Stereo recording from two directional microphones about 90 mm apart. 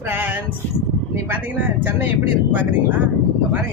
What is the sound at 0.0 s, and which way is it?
Speech, 20° right (ahead or behind).